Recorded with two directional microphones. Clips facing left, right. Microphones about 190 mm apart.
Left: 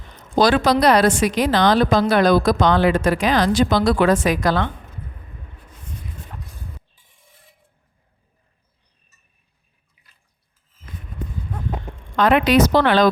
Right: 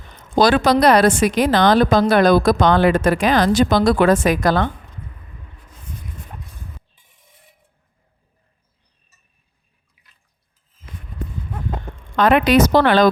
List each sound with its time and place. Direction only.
0.3 s a woman's voice: 55° right (ahead or behind)
12.1 s a woman's voice: 50° right (ahead or behind)